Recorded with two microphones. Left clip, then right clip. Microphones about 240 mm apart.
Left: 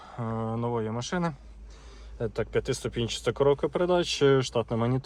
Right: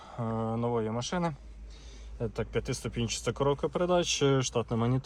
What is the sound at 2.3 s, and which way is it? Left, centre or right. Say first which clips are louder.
Speech: left 6 dB; centre.